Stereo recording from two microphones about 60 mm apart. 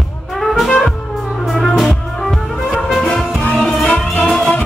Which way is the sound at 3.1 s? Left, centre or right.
Centre.